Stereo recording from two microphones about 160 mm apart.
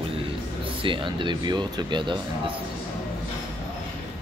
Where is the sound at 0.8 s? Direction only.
30° right (ahead or behind).